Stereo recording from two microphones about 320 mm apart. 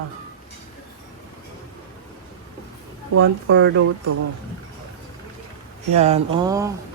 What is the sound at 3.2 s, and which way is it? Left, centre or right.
Speech, right.